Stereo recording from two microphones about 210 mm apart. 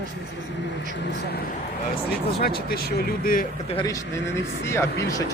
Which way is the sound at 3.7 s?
20° left (ahead or behind).